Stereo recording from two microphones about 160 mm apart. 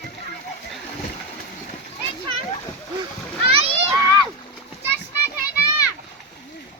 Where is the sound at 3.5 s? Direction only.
35° right (ahead or behind).